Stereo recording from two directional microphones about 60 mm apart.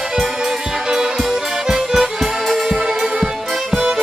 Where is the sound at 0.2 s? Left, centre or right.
Centre.